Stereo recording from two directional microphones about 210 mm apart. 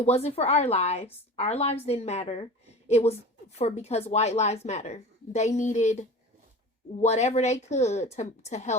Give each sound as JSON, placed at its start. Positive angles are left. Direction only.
{"t": 0.0, "sound": "a woman's voice", "side_deg": 30}